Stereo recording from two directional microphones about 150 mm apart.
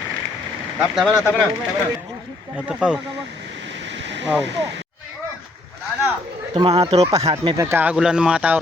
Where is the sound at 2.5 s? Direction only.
5° right (ahead or behind).